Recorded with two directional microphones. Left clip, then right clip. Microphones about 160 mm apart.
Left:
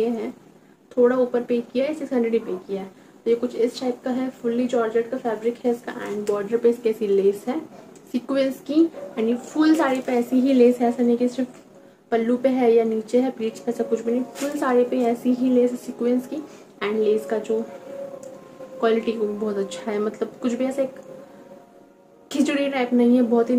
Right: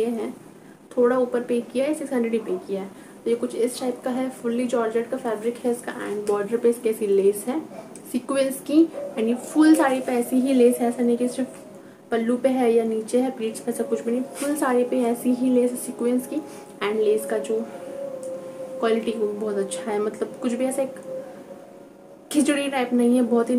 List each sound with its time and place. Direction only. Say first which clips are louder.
1.0 s speech: left 2 dB; 15° right (ahead or behind)
18.8 s speech: left 2 dB; 10° right (ahead or behind)
22.3 s speech: even; 10° right (ahead or behind)